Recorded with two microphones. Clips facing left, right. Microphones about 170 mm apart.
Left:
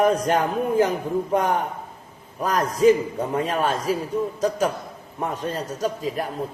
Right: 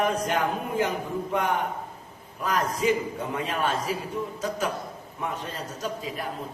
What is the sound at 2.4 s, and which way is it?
A man's voice, 40° left (ahead or behind).